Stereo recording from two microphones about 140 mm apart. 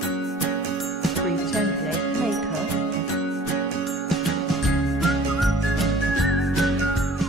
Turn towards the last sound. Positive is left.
turn(degrees=0)  # may be behind; listen again after turning